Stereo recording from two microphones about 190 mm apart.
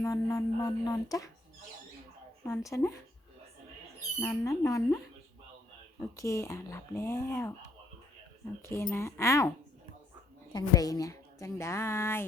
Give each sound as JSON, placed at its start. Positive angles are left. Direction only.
{"t": 0.0, "sound": "a woman's voice", "side_deg": 15}
{"t": 2.4, "sound": "a woman's voice", "side_deg": 15}
{"t": 4.3, "sound": "a woman's voice", "side_deg": 15}
{"t": 6.0, "sound": "a woman's voice", "side_deg": 15}
{"t": 8.7, "sound": "a woman's voice", "side_deg": 15}
{"t": 10.5, "sound": "a woman's voice", "side_deg": 20}